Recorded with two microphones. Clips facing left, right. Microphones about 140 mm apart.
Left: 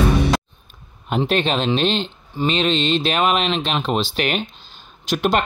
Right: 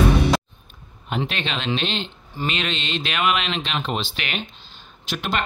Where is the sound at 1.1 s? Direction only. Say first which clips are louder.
Left 7 dB; 40° left (ahead or behind).